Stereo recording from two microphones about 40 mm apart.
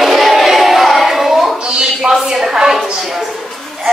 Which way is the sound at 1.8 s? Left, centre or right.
Centre.